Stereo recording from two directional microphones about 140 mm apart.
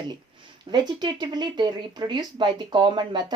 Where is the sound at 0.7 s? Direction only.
30° right (ahead or behind).